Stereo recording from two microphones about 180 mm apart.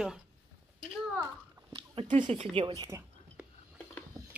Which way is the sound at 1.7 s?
25° right (ahead or behind).